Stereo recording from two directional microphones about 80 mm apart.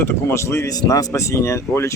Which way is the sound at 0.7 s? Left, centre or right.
Left.